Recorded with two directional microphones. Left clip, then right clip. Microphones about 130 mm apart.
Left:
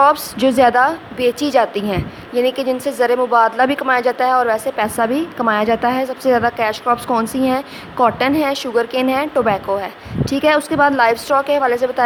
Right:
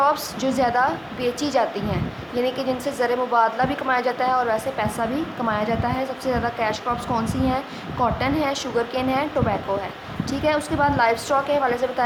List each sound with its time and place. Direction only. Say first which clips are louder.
0.0 s a woman's voice: left 8 dB; 65° left (ahead or behind)